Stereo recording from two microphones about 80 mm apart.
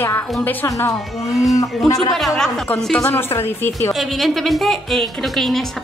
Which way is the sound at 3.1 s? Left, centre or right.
Left.